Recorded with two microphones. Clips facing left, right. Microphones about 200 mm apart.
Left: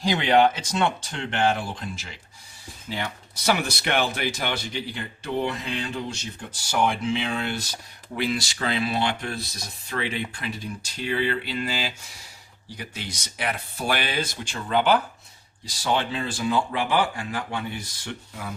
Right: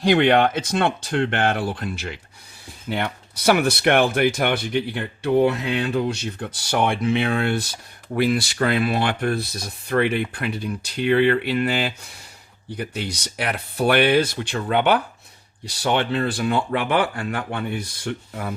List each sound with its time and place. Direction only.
0.0 s speech: 60° right (ahead or behind)